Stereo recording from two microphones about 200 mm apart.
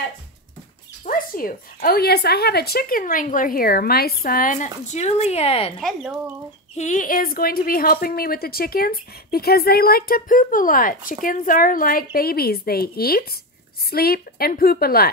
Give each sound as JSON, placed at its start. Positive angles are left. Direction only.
{"t": 1.0, "sound": "speech", "side_deg": 45}
{"t": 5.8, "sound": "speech", "side_deg": 0}
{"t": 6.8, "sound": "speech", "side_deg": 40}